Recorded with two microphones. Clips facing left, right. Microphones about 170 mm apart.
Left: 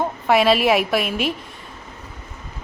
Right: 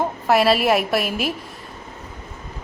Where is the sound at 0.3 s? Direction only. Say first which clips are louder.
Left 1 dB; centre (ahead or behind).